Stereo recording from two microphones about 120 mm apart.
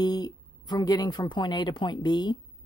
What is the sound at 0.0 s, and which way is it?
A woman's voice, 35° left (ahead or behind).